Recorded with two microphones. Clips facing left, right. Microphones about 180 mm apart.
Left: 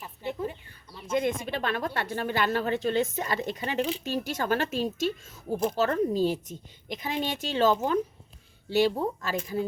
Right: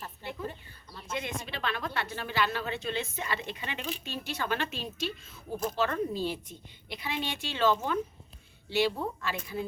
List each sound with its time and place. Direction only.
1.1 s a woman's voice: 50° left (ahead or behind)